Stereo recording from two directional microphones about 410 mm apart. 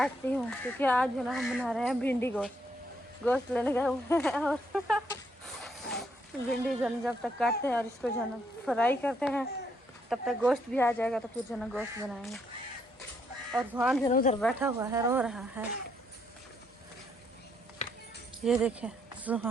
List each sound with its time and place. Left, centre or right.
0.0 s speech: centre
5.6 s a sound: centre
6.7 s speech: centre
13.5 s speech: centre
14.1 s speech: centre
14.4 s speech: centre
18.4 s speech: centre